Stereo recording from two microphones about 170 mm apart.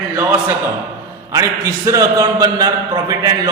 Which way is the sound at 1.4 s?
20° right (ahead or behind).